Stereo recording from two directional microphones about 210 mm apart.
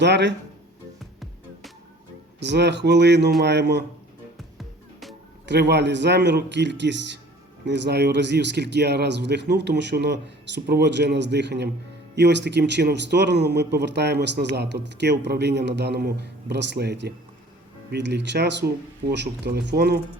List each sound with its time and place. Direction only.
0.0 s a man's voice: 55° right (ahead or behind)
2.4 s a man's voice: 55° right (ahead or behind)
4.5 s music: centre (ahead or behind)
5.5 s a man's voice: 55° right (ahead or behind)